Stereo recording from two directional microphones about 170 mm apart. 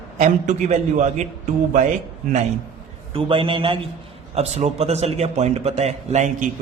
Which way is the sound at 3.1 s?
35° right (ahead or behind).